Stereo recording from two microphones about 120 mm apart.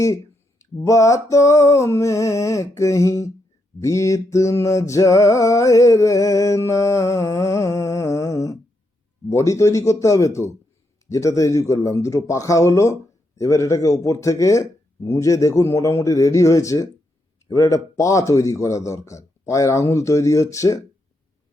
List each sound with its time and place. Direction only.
0.6 s speech: 25° left (ahead or behind)
3.8 s a sound: 25° left (ahead or behind)
9.3 s speech: 25° left (ahead or behind)